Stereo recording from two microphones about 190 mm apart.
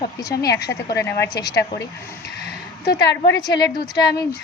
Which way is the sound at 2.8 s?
65° left (ahead or behind).